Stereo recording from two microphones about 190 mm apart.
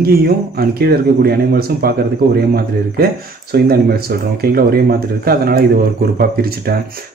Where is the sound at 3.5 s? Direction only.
55° right (ahead or behind).